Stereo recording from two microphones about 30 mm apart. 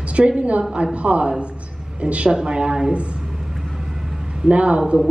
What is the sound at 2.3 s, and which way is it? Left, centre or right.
Speech, right.